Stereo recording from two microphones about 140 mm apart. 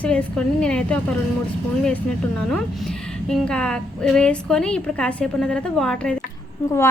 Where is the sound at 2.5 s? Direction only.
5° left (ahead or behind).